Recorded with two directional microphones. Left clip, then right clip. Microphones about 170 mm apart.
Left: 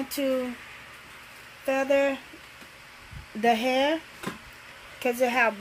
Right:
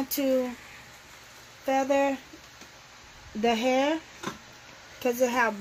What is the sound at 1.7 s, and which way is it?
Speech, 50° right (ahead or behind).